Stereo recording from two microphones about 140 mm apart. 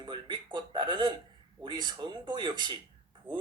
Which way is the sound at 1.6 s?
30° right (ahead or behind).